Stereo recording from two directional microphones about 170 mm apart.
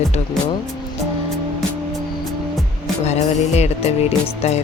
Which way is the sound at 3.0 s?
40° left (ahead or behind).